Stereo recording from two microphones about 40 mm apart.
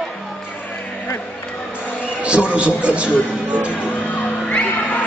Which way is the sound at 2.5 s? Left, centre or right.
Right.